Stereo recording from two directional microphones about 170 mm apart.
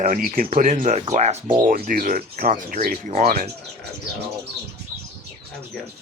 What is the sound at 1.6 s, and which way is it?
Speech, 55° right (ahead or behind).